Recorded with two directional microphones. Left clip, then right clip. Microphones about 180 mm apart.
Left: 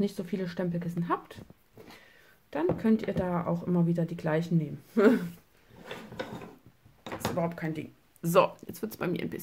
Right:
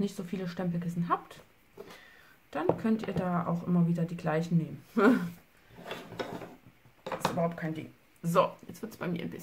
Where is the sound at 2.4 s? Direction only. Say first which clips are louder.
Left 2 dB; 30° left (ahead or behind).